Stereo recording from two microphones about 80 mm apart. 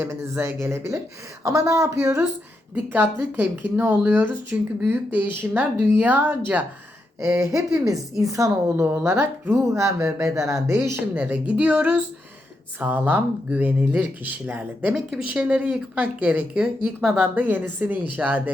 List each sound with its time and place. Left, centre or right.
0.0 s speech: right
2.7 s speech: right
7.2 s speech: right
8.7 s speech: right
11.1 s speech: right
12.8 s speech: right; by 17.2 s centre
17.3 s speech: right